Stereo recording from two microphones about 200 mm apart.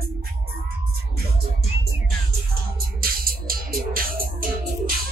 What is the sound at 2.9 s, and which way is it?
Music, 45° right (ahead or behind).